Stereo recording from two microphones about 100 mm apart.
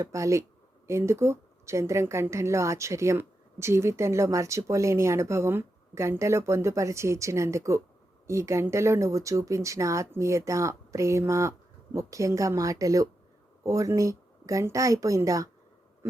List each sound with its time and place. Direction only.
0.0 s a woman's voice: 30° right (ahead or behind)